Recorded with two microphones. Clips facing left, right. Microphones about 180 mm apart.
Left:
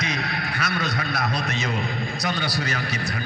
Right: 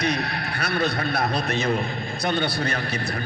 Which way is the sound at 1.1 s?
30° right (ahead or behind).